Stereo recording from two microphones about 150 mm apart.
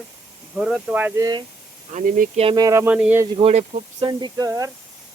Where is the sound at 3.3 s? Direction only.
45° right (ahead or behind).